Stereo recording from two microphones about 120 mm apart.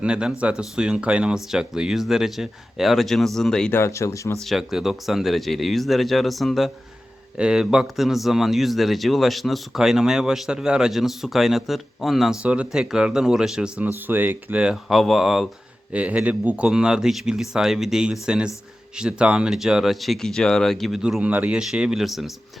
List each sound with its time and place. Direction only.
0.0 s a man's voice: 5° right (ahead or behind)
3.7 s speech: 20° left (ahead or behind)
4.4 s a man's voice: centre (ahead or behind)